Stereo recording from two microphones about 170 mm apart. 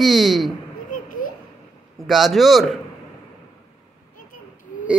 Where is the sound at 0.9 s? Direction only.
50° left (ahead or behind).